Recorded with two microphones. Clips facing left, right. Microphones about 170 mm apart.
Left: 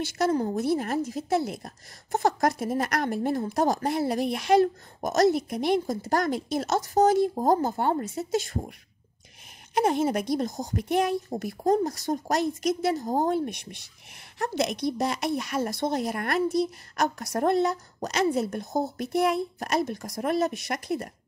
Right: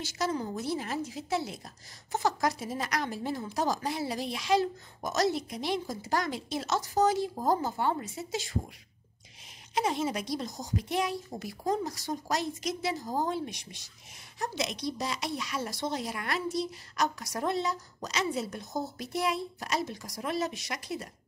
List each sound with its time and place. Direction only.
0.0 s a woman's voice: 55° left (ahead or behind)
9.8 s a woman's voice: 55° left (ahead or behind)